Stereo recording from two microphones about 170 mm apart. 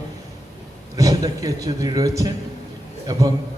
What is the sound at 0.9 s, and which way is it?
A man's voice, 20° right (ahead or behind).